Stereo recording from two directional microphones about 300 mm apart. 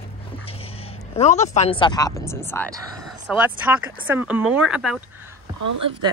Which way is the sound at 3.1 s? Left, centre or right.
Centre.